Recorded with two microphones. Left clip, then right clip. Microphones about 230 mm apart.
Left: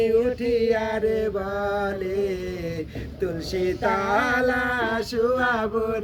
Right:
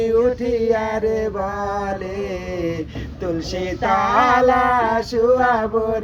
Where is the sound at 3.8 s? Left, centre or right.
Right.